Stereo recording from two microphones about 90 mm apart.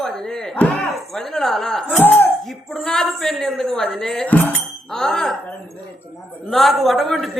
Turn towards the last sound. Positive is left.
turn(degrees=0)  # may be behind; listen again after turning